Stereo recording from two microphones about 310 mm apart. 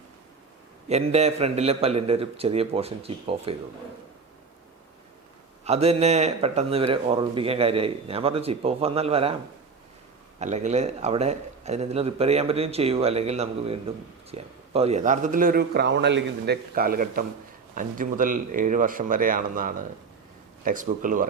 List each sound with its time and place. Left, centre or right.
0.9 s a man's voice: right
5.6 s a man's voice: centre
10.4 s a man's voice: right